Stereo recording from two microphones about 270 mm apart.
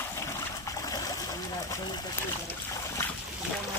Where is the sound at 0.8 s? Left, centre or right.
Centre.